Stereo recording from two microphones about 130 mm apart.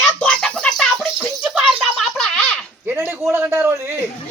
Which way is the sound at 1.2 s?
5° right (ahead or behind).